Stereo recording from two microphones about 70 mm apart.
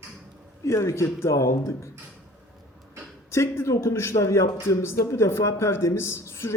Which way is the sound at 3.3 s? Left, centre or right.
Left.